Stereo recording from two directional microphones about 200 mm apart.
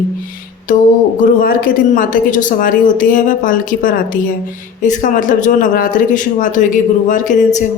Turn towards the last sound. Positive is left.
turn(degrees=40)  # may be behind; listen again after turning